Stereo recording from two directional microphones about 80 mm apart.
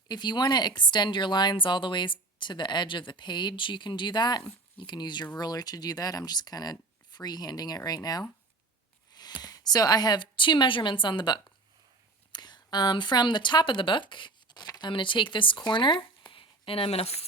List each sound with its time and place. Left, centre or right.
0.1 s speech: left
9.4 s speech: left
12.3 s speech: left